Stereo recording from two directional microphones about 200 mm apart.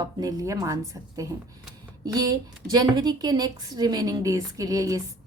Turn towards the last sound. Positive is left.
turn(degrees=-15)  # may be behind; listen again after turning